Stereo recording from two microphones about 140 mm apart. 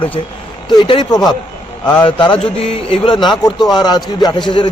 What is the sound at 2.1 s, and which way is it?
Speech, 40° left (ahead or behind).